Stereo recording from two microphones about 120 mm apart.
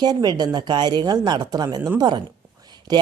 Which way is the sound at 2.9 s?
35° right (ahead or behind).